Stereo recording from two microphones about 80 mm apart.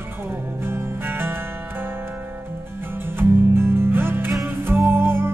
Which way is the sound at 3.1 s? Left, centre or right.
Right.